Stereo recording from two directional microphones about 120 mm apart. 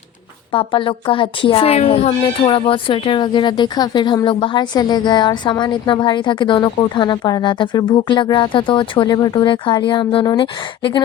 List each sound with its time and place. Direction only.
0.5 s a woman's voice: 45° left (ahead or behind); by 2.1 s 60° left (ahead or behind)
2.5 s speech: 50° left (ahead or behind)